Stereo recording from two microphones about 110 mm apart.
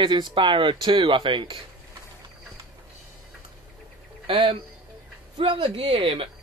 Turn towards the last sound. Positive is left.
turn(degrees=-50)  # may be behind; listen again after turning